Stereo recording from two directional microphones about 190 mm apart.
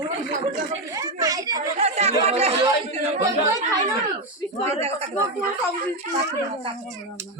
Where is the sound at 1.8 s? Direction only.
35° right (ahead or behind).